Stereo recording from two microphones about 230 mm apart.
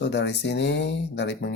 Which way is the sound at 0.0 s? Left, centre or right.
Left.